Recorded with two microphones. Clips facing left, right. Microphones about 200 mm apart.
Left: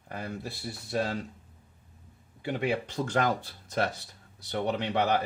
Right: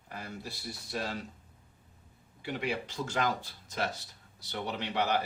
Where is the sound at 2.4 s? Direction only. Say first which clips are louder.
Left 5 dB; 50° left (ahead or behind).